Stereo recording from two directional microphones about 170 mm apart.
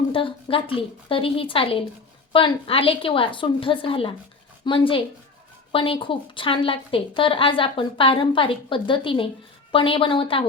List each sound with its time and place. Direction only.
0.1 s a woman's voice: 30° left (ahead or behind)